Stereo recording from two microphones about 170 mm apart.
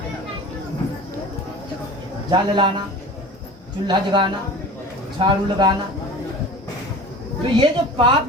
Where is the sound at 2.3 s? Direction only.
25° right (ahead or behind).